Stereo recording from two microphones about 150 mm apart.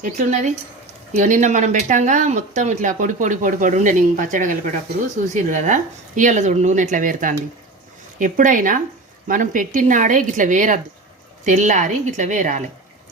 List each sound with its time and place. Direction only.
0.0 s speech: 50° right (ahead or behind)